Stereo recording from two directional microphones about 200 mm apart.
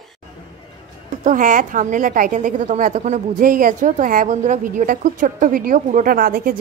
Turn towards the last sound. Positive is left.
turn(degrees=-45)  # may be behind; listen again after turning